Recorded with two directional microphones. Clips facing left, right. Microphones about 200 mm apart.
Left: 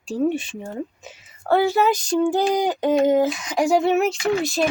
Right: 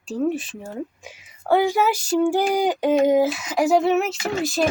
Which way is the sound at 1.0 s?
10° right (ahead or behind).